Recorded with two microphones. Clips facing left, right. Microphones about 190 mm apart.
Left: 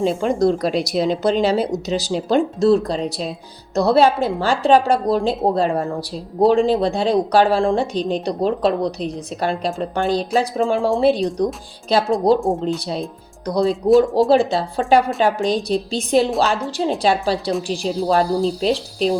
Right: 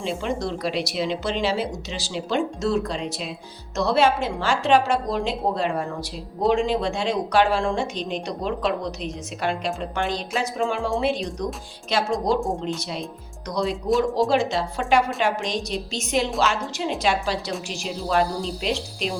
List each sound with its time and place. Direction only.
0.0 s speech: 40° left (ahead or behind)